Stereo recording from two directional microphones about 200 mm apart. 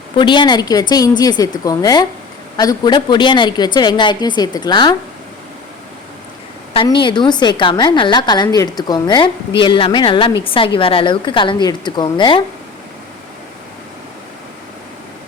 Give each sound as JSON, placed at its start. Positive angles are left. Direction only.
{"t": 0.2, "sound": "a woman's voice", "side_deg": 25}
{"t": 6.7, "sound": "a woman's voice", "side_deg": 25}